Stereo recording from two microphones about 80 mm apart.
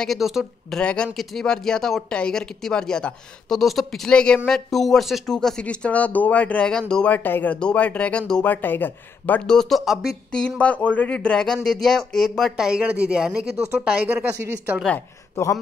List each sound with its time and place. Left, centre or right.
0.0 s speech: centre
0.7 s speech: centre
7.1 s speech: left
8.6 s speech: left
9.5 s speech: centre
10.6 s speech: centre
15.4 s speech: left